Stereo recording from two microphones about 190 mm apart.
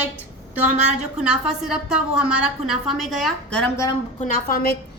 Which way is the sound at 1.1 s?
5° right (ahead or behind).